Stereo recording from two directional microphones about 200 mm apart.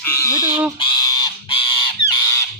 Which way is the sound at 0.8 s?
20° left (ahead or behind).